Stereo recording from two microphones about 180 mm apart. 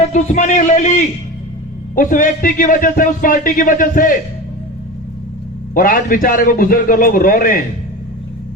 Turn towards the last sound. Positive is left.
turn(degrees=50)  # may be behind; listen again after turning